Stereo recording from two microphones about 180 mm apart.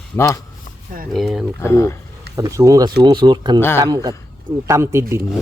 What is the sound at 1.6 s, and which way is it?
Speech, 15° left (ahead or behind).